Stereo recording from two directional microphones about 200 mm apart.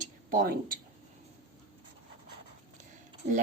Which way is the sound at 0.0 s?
45° right (ahead or behind).